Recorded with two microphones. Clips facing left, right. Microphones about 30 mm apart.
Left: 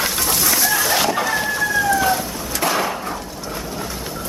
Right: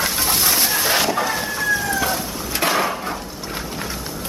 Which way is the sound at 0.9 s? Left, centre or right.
Centre.